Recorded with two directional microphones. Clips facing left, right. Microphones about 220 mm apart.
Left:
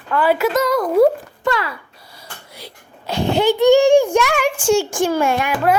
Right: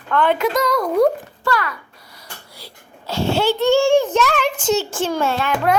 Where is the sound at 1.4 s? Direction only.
25° left (ahead or behind).